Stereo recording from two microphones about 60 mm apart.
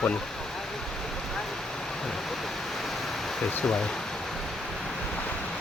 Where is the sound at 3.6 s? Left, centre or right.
Centre.